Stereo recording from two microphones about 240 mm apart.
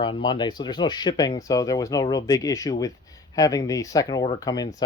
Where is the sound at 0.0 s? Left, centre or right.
Centre.